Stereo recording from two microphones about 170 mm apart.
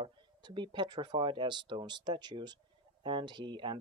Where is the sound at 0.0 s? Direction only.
25° right (ahead or behind).